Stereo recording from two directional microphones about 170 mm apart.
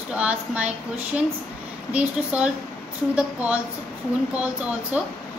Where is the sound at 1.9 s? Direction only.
10° right (ahead or behind).